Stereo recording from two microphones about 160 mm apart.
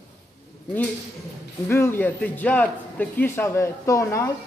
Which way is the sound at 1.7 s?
15° left (ahead or behind).